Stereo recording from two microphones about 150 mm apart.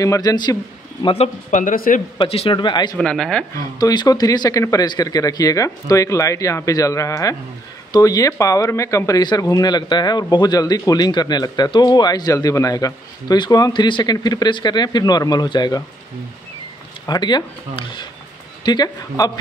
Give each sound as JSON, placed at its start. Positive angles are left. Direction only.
{"t": 0.0, "sound": "speech", "side_deg": 20}
{"t": 1.0, "sound": "speech", "side_deg": 45}
{"t": 1.6, "sound": "speech", "side_deg": 60}
{"t": 2.1, "sound": "speech", "side_deg": 40}
{"t": 2.5, "sound": "speech", "side_deg": 30}
{"t": 3.0, "sound": "speech", "side_deg": 5}
{"t": 3.5, "sound": "speech", "side_deg": 25}
{"t": 17.0, "sound": "speech", "side_deg": 30}